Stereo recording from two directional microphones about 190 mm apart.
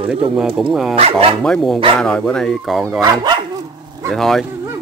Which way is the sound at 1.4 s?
Centre (ahead or behind).